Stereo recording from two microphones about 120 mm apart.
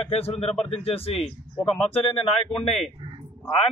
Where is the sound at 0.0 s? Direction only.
55° left (ahead or behind).